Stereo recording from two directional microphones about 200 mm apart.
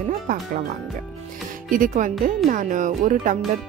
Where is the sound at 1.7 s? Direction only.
40° right (ahead or behind).